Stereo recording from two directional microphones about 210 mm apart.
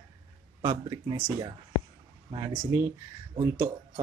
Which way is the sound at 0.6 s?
20° right (ahead or behind).